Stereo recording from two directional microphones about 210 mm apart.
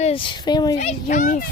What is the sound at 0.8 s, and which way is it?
Speech, 35° left (ahead or behind).